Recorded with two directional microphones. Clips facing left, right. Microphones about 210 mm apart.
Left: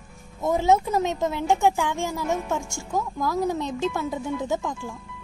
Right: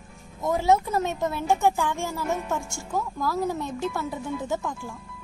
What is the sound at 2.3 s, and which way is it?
Speech, centre (ahead or behind).